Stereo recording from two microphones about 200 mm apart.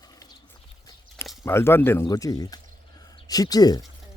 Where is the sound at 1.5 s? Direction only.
10° left (ahead or behind).